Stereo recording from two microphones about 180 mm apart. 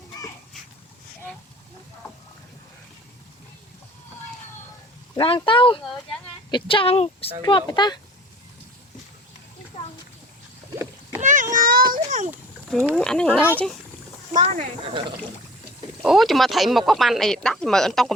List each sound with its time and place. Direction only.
5.1 s speech: 30° left (ahead or behind)
11.2 s a sound: 45° right (ahead or behind)
12.7 s speech: 5° left (ahead or behind)
14.4 s speech: 35° right (ahead or behind)
16.0 s speech: centre (ahead or behind)